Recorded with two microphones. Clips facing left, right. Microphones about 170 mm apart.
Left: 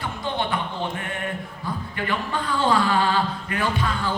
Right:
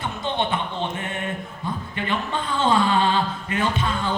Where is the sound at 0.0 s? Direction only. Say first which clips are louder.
Right 2 dB; 20° right (ahead or behind).